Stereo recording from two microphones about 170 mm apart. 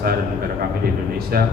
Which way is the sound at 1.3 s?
60° right (ahead or behind).